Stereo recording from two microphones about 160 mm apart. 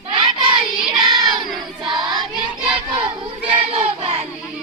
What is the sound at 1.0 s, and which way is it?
Child singing, 30° right (ahead or behind).